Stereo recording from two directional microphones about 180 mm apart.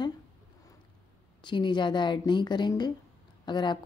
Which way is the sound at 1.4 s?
25° left (ahead or behind).